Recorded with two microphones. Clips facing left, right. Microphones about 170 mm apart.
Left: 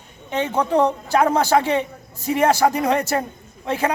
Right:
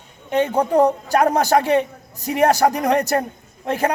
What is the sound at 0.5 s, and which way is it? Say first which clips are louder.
Speech: right 1 dB; 40° right (ahead or behind).